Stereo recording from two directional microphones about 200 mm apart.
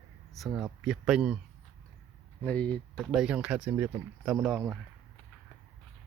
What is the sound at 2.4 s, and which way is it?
Speech, 5° left (ahead or behind).